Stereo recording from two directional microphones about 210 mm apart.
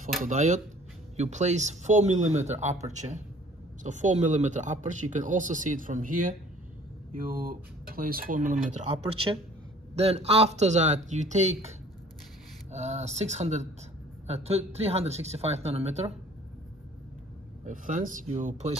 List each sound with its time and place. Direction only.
0.2 s speech: 35° right (ahead or behind)
9.9 s speech: 30° right (ahead or behind)
12.7 s speech: 30° right (ahead or behind)
17.6 s speech: 40° right (ahead or behind)